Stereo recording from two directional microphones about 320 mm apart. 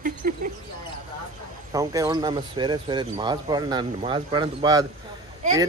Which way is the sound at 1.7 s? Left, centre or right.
Centre.